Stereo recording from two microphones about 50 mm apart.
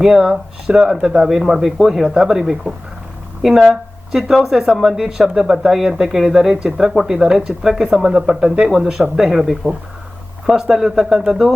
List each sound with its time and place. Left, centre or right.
0.0 s speech: centre